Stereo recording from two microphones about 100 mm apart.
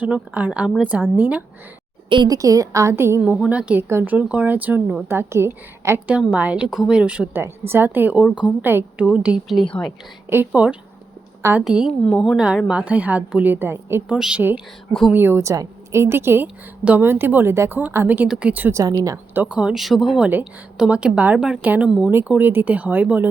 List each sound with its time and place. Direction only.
0.0 s a woman's voice: 15° right (ahead or behind)
2.2 s a woman's voice: 35° right (ahead or behind)
3.2 s a woman's voice: 15° right (ahead or behind)
6.1 s a woman's voice: 15° right (ahead or behind)
6.7 s a woman's voice: 5° right (ahead or behind)
7.3 s a woman's voice: 25° right (ahead or behind)
14.1 s a woman's voice: 10° right (ahead or behind)
15.1 s a woman's voice: 25° right (ahead or behind)
19.5 s a woman's voice: 5° right (ahead or behind)
22.3 s a woman's voice: 20° right (ahead or behind)